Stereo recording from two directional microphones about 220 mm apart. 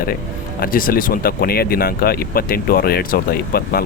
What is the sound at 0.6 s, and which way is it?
Speech, 40° left (ahead or behind).